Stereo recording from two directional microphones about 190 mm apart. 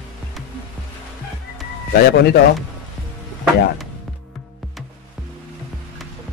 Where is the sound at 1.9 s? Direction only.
60° left (ahead or behind).